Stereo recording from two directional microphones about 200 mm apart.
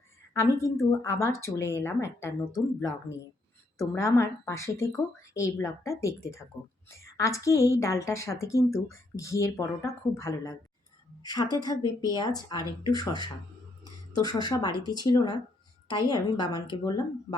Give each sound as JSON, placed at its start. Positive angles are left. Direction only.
{"t": 0.3, "sound": "a woman's voice", "side_deg": 15}
{"t": 7.2, "sound": "a woman's voice", "side_deg": 15}
{"t": 14.4, "sound": "speech", "side_deg": 20}